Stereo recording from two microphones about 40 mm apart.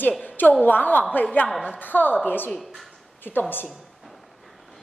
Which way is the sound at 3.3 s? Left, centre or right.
Left.